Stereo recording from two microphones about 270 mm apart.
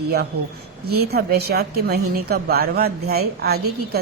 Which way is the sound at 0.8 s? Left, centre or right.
Right.